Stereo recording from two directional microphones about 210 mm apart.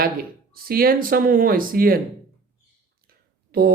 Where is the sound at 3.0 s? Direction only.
45° right (ahead or behind).